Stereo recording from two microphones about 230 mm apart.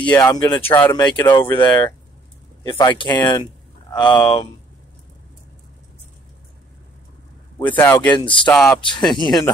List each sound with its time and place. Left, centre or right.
0.1 s speech: centre
7.5 s speech: centre
8.2 s speech: left
8.5 s speech: centre
8.8 s speech: centre